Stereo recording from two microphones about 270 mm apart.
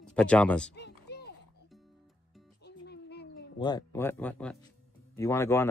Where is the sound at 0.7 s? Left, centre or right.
Left.